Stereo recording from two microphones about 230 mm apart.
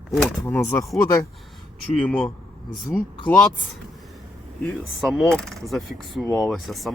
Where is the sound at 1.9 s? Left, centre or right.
Centre.